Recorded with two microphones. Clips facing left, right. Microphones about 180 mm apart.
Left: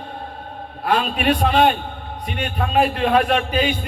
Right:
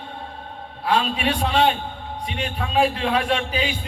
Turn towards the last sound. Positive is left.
turn(degrees=55)  # may be behind; listen again after turning